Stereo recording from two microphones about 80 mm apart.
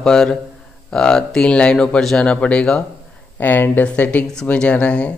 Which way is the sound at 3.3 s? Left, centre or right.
Left.